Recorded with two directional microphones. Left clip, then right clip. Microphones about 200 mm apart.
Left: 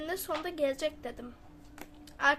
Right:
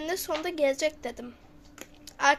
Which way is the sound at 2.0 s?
15° right (ahead or behind).